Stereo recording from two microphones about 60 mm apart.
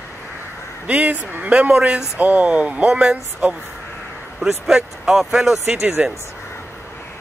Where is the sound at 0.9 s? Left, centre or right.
Right.